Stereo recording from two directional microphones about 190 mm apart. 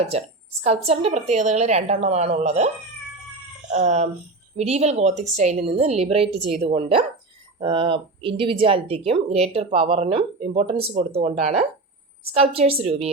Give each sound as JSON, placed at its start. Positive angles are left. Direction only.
{"t": 0.0, "sound": "speech", "side_deg": -35}
{"t": 3.7, "sound": "speech", "side_deg": -35}